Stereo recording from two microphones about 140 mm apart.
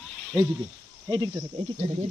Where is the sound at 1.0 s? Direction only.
30° right (ahead or behind).